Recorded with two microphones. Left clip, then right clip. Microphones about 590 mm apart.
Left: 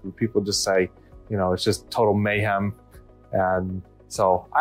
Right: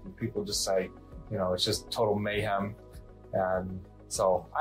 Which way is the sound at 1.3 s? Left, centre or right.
Left.